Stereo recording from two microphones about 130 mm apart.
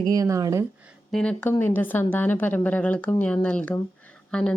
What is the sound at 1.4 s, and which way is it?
A woman's voice, 15° left (ahead or behind).